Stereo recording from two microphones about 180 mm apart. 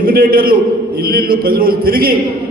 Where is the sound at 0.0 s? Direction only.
55° right (ahead or behind).